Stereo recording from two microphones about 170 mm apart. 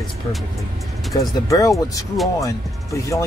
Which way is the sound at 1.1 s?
20° left (ahead or behind).